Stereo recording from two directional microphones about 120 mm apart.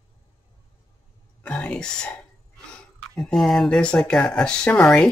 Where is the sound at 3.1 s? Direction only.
Centre (ahead or behind).